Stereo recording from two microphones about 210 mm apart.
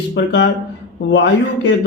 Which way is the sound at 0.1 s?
60° left (ahead or behind).